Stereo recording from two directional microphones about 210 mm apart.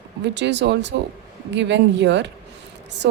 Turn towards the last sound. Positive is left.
turn(degrees=-55)  # may be behind; listen again after turning